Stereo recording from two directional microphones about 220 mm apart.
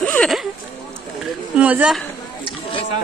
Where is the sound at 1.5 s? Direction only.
5° right (ahead or behind).